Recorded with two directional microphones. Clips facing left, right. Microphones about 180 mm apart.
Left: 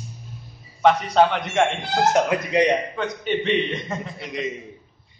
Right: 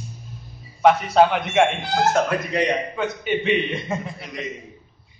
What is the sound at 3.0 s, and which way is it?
A man's voice, 5° right (ahead or behind).